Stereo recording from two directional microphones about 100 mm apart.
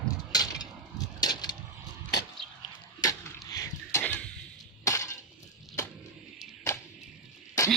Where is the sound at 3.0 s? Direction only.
35° left (ahead or behind).